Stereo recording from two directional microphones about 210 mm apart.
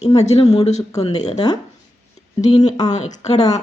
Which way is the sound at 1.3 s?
20° left (ahead or behind).